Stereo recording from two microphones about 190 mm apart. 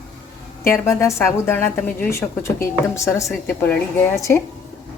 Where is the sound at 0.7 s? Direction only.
15° left (ahead or behind).